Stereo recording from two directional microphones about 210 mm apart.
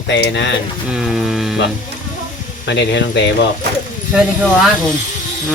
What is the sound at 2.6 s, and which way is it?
Speech, 55° left (ahead or behind).